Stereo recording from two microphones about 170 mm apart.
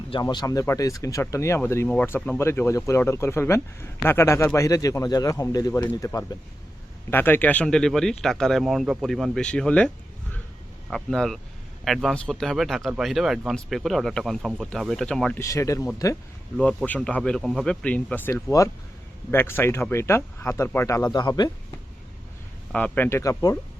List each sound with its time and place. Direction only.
0.1 s a man's voice: 25° left (ahead or behind); by 15.4 s 5° left (ahead or behind)
15.4 s a man's voice: 20° left (ahead or behind)
16.6 s a man's voice: 5° left (ahead or behind); by 21.5 s 25° left (ahead or behind)
22.7 s a man's voice: 10° left (ahead or behind)